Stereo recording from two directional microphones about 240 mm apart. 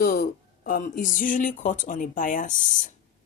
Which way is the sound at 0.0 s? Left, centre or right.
Left.